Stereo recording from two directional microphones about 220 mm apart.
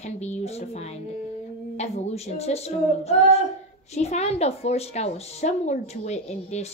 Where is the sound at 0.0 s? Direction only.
30° left (ahead or behind).